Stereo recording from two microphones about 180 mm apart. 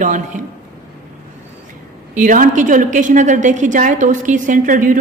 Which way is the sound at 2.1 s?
45° right (ahead or behind).